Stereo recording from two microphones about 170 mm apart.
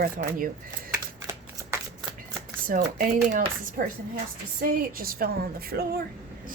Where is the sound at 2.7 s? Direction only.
55° right (ahead or behind).